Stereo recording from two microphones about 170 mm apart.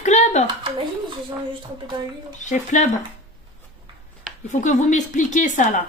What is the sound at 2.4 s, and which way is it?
Speech, 45° left (ahead or behind).